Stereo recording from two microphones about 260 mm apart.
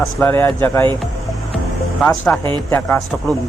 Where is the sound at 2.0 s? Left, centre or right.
Centre.